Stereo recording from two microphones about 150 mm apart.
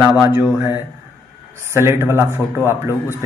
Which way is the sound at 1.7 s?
15° right (ahead or behind).